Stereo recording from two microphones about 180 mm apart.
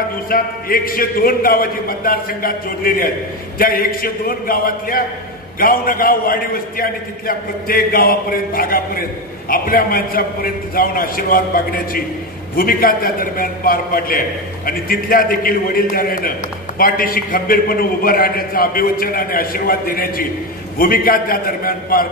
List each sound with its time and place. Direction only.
0.3 s a man's voice: 55° left (ahead or behind)